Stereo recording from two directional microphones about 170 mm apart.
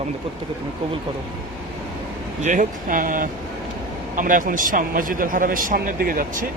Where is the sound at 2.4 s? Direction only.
50° right (ahead or behind).